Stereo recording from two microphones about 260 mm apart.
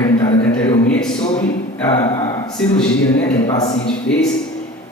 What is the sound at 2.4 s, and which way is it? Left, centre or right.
Speech, centre.